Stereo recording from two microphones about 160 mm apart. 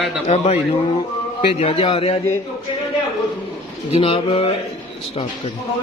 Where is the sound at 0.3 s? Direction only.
45° left (ahead or behind).